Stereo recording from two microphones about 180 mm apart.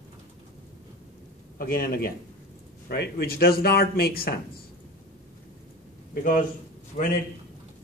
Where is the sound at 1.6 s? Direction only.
55° left (ahead or behind).